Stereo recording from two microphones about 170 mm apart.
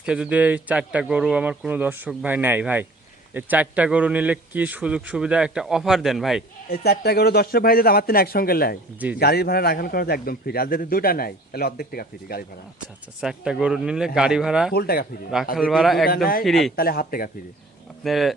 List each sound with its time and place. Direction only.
0.0 s a man's voice: 5° right (ahead or behind)
6.7 s a man's voice: 65° left (ahead or behind)
13.1 s a man's voice: 5° right (ahead or behind)
14.7 s speech: 65° left (ahead or behind)
15.5 s a man's voice: centre (ahead or behind)
16.0 s a man's voice: 60° left (ahead or behind)
16.4 s a man's voice: centre (ahead or behind)
16.7 s a man's voice: 60° left (ahead or behind)
18.0 s a man's voice: centre (ahead or behind)